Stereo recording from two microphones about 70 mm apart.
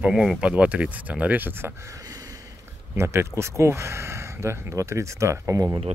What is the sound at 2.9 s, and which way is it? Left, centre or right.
Speech, right.